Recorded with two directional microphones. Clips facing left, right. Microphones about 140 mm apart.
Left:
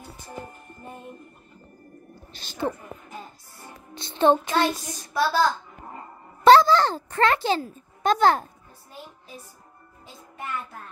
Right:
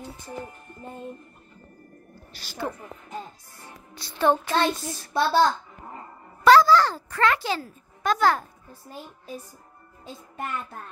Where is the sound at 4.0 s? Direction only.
20° left (ahead or behind).